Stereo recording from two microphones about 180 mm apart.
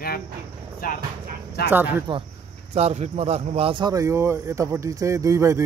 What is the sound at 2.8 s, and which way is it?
Speech, 35° right (ahead or behind).